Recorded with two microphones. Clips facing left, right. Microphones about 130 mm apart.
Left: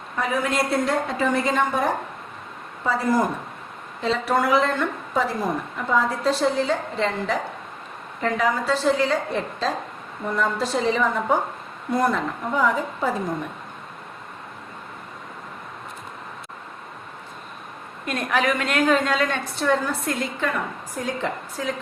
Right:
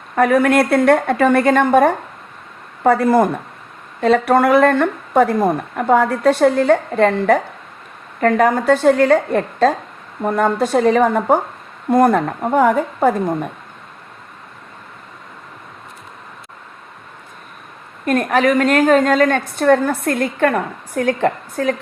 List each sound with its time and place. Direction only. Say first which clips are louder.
0.2 s a woman's voice: right 10 dB; 65° right (ahead or behind)
18.0 s a woman's voice: right 8 dB; 45° right (ahead or behind)